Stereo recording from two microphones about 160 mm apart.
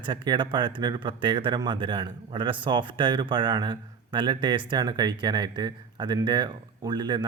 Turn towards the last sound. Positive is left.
turn(degrees=-25)  # may be behind; listen again after turning